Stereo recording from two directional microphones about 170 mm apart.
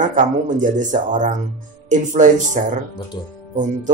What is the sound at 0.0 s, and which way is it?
Speech, 45° right (ahead or behind).